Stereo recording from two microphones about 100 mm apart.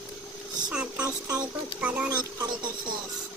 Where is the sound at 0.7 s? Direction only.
10° right (ahead or behind).